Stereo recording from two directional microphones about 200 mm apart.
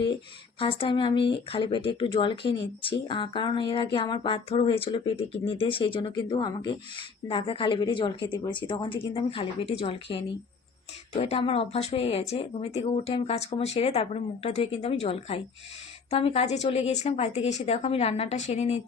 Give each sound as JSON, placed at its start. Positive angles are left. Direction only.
{"t": 0.6, "sound": "a woman's voice", "side_deg": 25}